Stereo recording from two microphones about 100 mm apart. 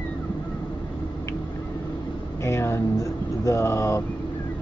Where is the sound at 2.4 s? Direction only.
25° left (ahead or behind).